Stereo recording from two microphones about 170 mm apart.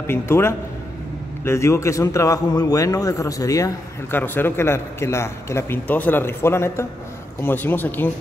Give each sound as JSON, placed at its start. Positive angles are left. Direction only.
{"t": 0.0, "sound": "a man's voice", "side_deg": 15}